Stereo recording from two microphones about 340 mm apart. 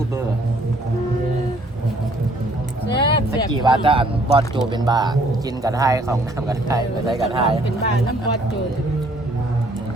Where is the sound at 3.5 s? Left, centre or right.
Centre.